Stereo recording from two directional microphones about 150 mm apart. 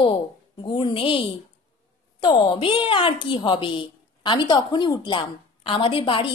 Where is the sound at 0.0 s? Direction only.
35° left (ahead or behind).